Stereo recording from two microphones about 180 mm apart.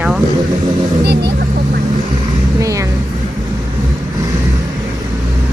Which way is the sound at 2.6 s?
20° right (ahead or behind).